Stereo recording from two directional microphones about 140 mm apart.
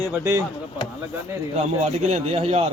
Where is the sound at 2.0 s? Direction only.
50° right (ahead or behind).